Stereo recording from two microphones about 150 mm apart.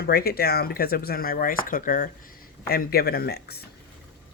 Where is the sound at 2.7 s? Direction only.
90° left.